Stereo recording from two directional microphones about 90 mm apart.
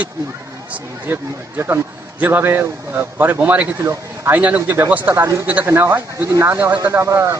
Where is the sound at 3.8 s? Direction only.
30° right (ahead or behind).